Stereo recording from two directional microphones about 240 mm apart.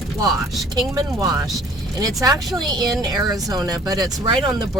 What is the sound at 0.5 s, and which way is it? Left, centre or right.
Speech, centre.